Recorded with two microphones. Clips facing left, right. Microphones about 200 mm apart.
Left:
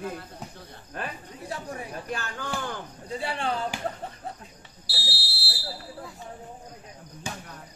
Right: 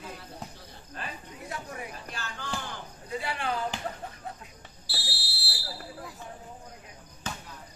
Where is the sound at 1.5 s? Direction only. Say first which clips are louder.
Left 4 dB; 30° left (ahead or behind).